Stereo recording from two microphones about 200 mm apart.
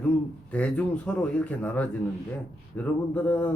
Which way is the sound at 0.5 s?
5° left (ahead or behind).